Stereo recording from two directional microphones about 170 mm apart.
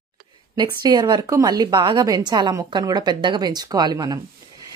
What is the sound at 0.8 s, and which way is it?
Speech, 25° right (ahead or behind).